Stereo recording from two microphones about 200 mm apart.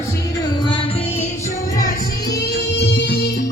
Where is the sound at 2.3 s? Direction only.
55° left (ahead or behind).